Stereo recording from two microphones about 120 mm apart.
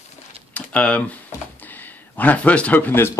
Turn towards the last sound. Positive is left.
turn(degrees=20)  # may be behind; listen again after turning